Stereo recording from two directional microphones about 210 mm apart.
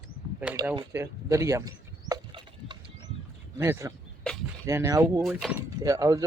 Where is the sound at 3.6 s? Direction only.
15° right (ahead or behind).